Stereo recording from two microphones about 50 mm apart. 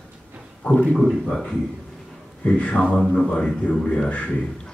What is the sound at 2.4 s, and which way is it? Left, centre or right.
Speech, left.